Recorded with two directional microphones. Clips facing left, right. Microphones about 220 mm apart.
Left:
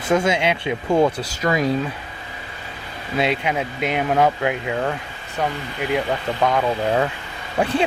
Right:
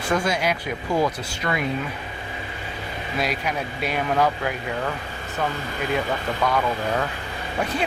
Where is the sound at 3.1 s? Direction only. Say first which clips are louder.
Left 5 dB; 25° left (ahead or behind).